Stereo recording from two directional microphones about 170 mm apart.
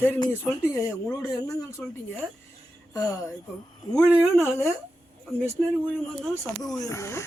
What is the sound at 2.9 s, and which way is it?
Speech, 20° left (ahead or behind).